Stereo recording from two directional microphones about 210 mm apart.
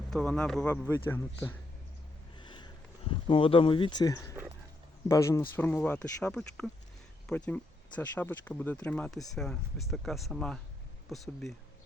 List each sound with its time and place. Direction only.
0.1 s speech: 5° left (ahead or behind)
2.4 s a sound: 20° left (ahead or behind)
5.0 s speech: 15° left (ahead or behind)